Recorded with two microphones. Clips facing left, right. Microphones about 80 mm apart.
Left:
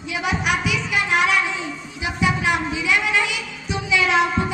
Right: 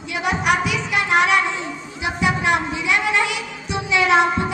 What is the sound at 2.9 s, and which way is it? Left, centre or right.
Speech, right.